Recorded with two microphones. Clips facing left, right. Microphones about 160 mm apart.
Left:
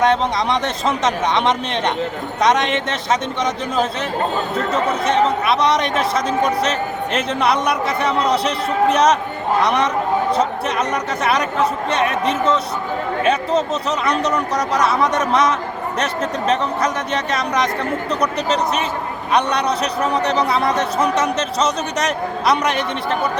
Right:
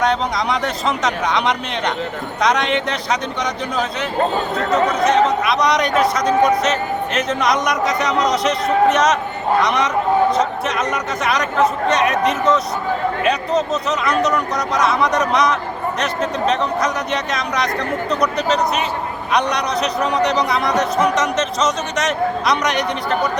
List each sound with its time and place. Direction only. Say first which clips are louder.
4.7 s a man's voice: right 4 dB; 30° left (ahead or behind)
10.9 s a man's voice: left 1 dB; 30° left (ahead or behind)
14.2 s a man's voice: right 1 dB; 30° left (ahead or behind)
19.3 s a man's voice: left 1 dB; 30° left (ahead or behind)